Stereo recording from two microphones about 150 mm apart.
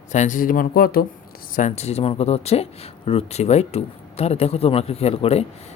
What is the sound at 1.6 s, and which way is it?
Speech, 50° left (ahead or behind).